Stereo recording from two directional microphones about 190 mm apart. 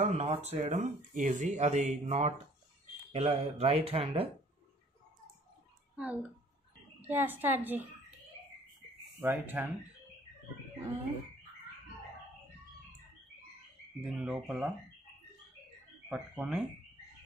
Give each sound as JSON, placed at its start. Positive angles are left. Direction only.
{"t": 0.0, "sound": "speech", "side_deg": -35}
{"t": 5.9, "sound": "a woman's voice", "side_deg": -5}
{"t": 9.2, "sound": "a woman's voice", "side_deg": -10}
{"t": 14.0, "sound": "speech", "side_deg": 0}
{"t": 16.1, "sound": "speech", "side_deg": -5}